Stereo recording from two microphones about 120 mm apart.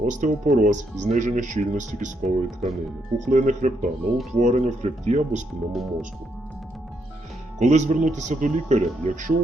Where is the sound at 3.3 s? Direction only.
90° right; by 5.4 s 75° right (ahead or behind).